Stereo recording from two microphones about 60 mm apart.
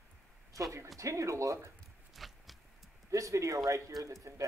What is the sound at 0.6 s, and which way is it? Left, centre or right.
Speech, right.